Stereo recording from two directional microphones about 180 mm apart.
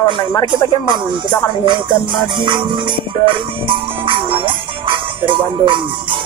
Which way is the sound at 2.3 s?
25° right (ahead or behind).